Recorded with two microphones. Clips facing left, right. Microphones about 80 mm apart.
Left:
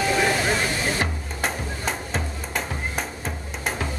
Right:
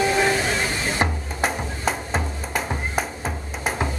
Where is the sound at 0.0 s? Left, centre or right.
Right.